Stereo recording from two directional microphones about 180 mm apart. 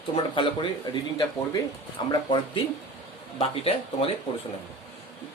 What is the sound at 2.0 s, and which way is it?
Speech, 25° left (ahead or behind).